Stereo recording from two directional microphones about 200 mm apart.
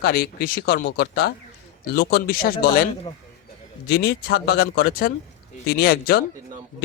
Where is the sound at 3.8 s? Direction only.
55° left (ahead or behind).